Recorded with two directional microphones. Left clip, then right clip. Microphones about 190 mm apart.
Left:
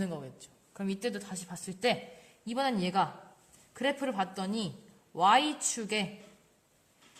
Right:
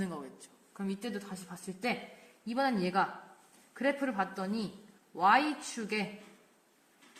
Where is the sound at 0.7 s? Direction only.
45° left (ahead or behind).